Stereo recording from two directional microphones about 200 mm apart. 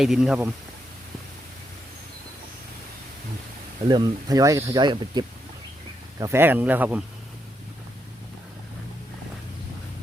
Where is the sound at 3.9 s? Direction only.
20° right (ahead or behind).